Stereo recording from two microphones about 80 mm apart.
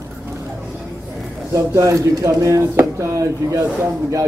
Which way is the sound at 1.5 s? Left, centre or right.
Right.